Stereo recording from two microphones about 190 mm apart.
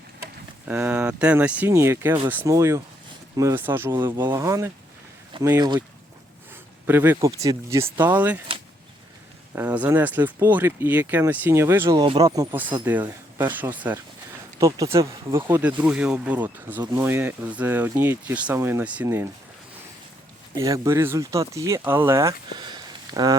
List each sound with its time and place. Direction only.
0.7 s speech: 5° right (ahead or behind); by 5.8 s 20° right (ahead or behind)
6.8 s speech: 10° right (ahead or behind)
9.6 s speech: 10° right (ahead or behind)
20.5 s speech: 15° right (ahead or behind)
22.5 s a sound: 20° right (ahead or behind)